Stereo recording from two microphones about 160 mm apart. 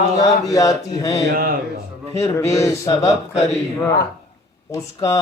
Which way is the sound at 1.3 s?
65° right (ahead or behind).